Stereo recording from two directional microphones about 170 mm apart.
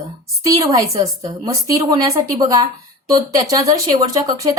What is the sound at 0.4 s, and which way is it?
A woman's voice, 20° right (ahead or behind).